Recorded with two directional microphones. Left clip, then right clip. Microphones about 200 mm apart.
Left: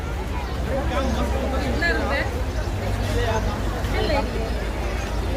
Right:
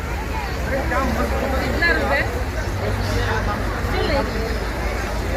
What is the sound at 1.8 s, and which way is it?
Speech, 35° right (ahead or behind).